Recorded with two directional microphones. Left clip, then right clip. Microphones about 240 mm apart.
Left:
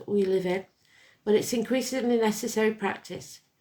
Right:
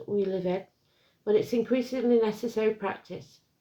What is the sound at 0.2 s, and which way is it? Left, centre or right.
Speech, left.